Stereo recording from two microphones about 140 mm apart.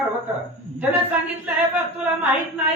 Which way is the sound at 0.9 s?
10° right (ahead or behind).